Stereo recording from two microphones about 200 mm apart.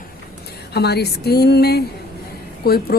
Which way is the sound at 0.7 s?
55° left (ahead or behind).